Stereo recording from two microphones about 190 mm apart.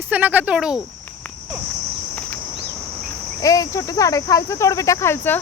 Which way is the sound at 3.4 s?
20° left (ahead or behind).